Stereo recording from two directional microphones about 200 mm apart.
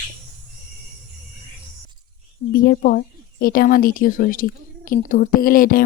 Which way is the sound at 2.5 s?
45° left (ahead or behind).